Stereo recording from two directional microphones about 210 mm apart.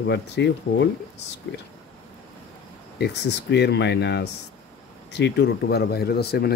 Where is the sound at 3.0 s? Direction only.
55° left (ahead or behind).